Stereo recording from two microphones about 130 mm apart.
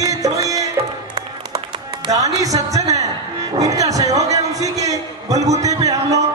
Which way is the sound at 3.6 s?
25° right (ahead or behind).